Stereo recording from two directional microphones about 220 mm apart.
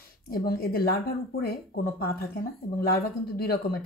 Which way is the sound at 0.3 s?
45° left (ahead or behind).